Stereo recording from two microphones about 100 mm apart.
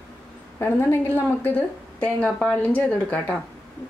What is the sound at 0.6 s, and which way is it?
A woman's voice, 25° left (ahead or behind).